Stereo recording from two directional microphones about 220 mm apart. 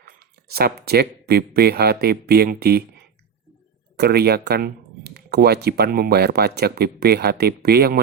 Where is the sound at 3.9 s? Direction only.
45° right (ahead or behind).